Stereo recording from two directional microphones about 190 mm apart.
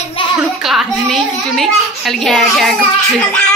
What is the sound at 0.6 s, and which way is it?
A child's voice, centre (ahead or behind).